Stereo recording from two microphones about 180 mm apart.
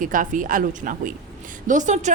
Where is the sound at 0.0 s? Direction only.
50° right (ahead or behind).